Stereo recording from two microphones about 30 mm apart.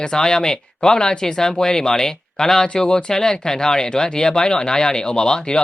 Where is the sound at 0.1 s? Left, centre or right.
Left.